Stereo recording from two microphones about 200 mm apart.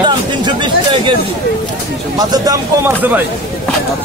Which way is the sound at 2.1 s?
20° right (ahead or behind).